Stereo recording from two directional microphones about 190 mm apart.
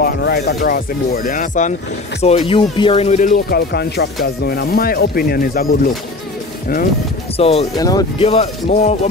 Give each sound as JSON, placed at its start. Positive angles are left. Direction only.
{"t": 0.0, "sound": "speech", "side_deg": 60}
{"t": 2.2, "sound": "speech", "side_deg": 30}
{"t": 7.3, "sound": "speech", "side_deg": 30}
{"t": 7.7, "sound": "speech", "side_deg": 20}
{"t": 8.2, "sound": "speech", "side_deg": 30}